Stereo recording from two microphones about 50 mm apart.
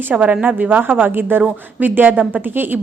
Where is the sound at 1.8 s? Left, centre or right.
Right.